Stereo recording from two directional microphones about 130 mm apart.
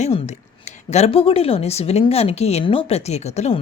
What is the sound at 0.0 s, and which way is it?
Speech, 60° left (ahead or behind).